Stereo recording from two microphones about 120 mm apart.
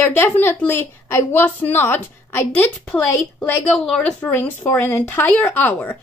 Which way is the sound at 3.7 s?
5° left (ahead or behind).